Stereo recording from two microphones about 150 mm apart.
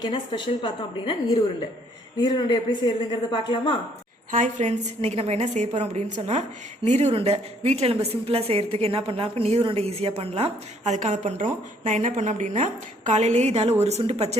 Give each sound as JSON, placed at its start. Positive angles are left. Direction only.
{"t": 0.0, "sound": "speech", "side_deg": 35}
{"t": 4.3, "sound": "a woman's voice", "side_deg": -55}
{"t": 11.9, "sound": "a woman's voice", "side_deg": -55}